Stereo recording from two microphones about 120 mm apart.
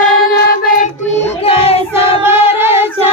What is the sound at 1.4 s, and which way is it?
Child singing, 50° left (ahead or behind).